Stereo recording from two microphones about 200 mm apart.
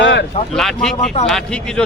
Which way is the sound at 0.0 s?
60° left (ahead or behind).